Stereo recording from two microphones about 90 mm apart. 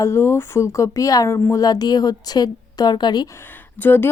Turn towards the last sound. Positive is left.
turn(degrees=25)  # may be behind; listen again after turning